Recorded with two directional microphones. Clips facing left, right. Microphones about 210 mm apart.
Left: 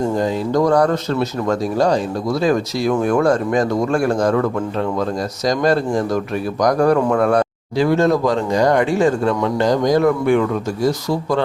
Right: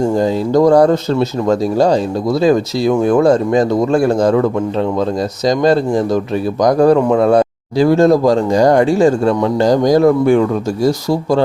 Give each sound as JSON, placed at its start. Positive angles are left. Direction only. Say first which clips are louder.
{"t": 0.2, "sound": "speech", "louder": "right 6 dB", "side_deg": -30}
{"t": 5.5, "sound": "speech", "louder": "right 4 dB", "side_deg": -25}
{"t": 7.8, "sound": "speech", "louder": "right 5 dB", "side_deg": -35}